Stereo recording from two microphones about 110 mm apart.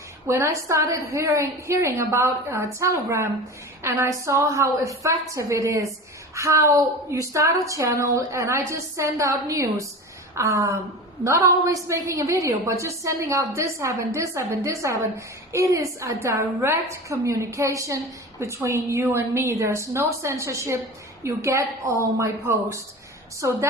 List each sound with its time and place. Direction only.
0.3 s a woman's voice: 25° right (ahead or behind)